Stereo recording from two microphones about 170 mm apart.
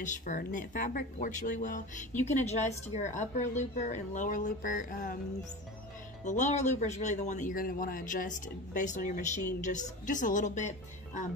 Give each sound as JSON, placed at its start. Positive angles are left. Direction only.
{"t": 0.0, "sound": "speech", "side_deg": 50}
{"t": 6.2, "sound": "speech", "side_deg": 45}